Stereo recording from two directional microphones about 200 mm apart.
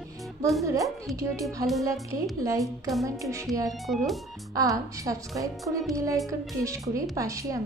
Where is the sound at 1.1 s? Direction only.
15° right (ahead or behind).